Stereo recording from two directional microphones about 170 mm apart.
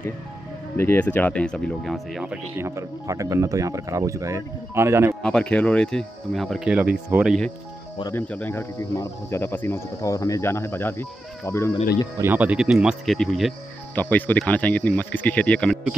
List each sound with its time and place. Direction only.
0.7 s speech: 10° left (ahead or behind); by 5.1 s 15° right (ahead or behind)
5.2 s speech: 5° left (ahead or behind)
8.1 s speech: 10° left (ahead or behind)
12.2 s speech: 10° right (ahead or behind)
13.9 s speech: 10° left (ahead or behind)